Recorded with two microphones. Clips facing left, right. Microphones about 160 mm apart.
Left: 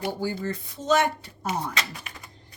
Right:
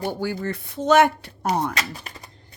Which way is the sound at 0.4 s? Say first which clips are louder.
Right 7 dB; 65° right (ahead or behind).